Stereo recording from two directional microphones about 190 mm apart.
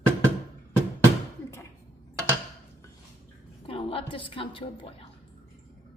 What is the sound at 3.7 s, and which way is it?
A woman's voice, 30° left (ahead or behind).